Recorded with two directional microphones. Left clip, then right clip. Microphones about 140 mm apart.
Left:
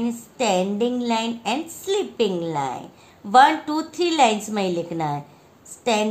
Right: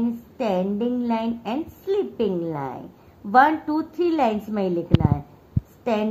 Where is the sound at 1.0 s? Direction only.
15° right (ahead or behind).